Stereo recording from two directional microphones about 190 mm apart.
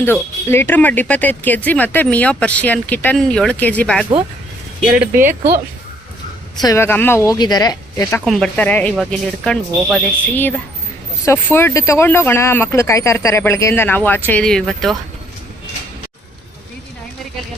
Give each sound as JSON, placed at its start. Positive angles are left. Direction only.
{"t": 0.0, "sound": "speech", "side_deg": 10}
{"t": 5.1, "sound": "speech", "side_deg": -45}
{"t": 6.6, "sound": "speech", "side_deg": 15}
{"t": 8.2, "sound": "speech", "side_deg": 0}